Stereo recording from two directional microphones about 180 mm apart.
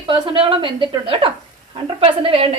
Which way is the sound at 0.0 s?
25° right (ahead or behind).